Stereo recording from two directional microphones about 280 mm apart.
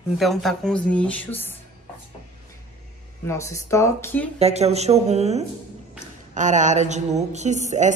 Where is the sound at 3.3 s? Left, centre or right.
Centre.